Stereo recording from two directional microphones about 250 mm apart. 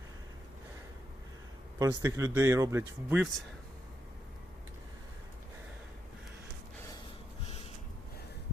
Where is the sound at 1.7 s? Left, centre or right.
Centre.